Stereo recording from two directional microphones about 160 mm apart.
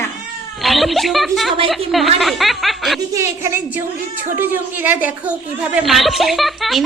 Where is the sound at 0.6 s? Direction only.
Centre (ahead or behind).